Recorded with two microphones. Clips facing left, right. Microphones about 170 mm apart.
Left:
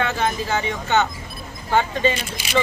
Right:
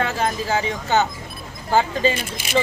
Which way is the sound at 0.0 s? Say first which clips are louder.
Even; 35° right (ahead or behind).